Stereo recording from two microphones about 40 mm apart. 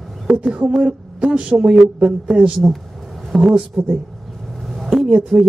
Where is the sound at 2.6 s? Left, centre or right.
Right.